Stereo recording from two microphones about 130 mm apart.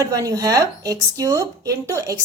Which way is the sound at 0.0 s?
25° right (ahead or behind).